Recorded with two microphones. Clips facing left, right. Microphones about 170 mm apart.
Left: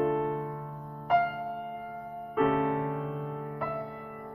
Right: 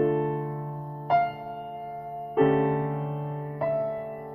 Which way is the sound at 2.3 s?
40° right (ahead or behind).